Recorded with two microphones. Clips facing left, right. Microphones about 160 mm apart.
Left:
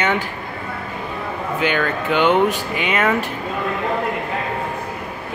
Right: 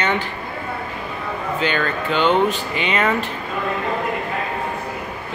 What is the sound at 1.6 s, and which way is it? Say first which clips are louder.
Speech: left 2 dB; 15° left (ahead or behind).